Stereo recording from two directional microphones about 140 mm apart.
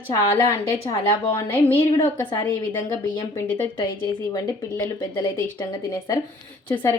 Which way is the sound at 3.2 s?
15° left (ahead or behind).